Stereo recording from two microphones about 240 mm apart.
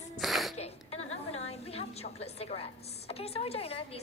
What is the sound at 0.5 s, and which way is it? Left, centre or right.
A woman's voice, left.